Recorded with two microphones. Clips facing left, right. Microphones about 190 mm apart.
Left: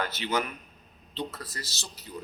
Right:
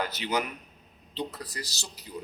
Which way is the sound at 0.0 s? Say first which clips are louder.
Even; 15° right (ahead or behind).